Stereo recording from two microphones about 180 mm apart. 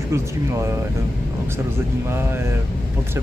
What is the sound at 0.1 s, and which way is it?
Speech, 15° right (ahead or behind).